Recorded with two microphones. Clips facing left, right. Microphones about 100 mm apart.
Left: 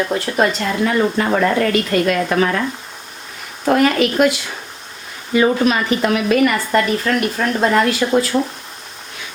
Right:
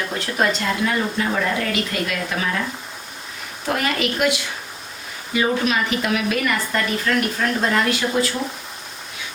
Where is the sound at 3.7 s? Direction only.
45° left (ahead or behind).